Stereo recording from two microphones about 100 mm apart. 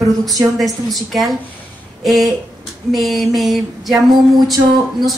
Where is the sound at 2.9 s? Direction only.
Centre (ahead or behind).